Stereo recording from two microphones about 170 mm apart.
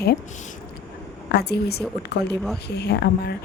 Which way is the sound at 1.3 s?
70° left (ahead or behind).